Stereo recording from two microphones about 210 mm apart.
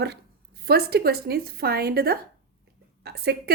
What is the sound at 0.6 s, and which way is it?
A woman's voice, 50° right (ahead or behind).